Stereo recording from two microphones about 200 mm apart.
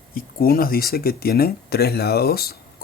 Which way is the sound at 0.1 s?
50° left (ahead or behind).